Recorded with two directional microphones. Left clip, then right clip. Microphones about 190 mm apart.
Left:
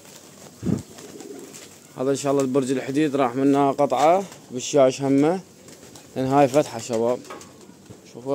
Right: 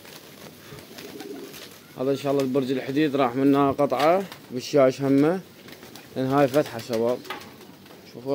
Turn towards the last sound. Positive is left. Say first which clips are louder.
# left 2 dB
turn(degrees=5)  # may be behind; listen again after turning